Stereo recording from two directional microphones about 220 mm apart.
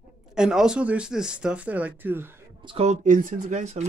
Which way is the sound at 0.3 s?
5° right (ahead or behind).